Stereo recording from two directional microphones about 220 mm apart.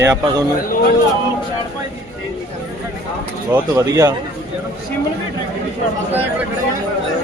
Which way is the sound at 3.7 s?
15° right (ahead or behind).